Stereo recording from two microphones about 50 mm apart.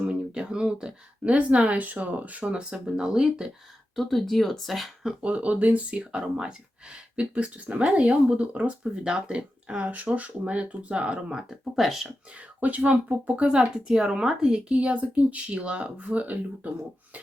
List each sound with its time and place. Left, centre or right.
0.0 s speech: right
3.9 s speech: centre
5.2 s speech: right
11.3 s speech: centre
12.5 s speech: right
13.5 s speech: centre; by 16.4 s right